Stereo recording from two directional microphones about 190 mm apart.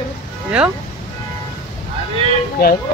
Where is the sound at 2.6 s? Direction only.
55° left (ahead or behind).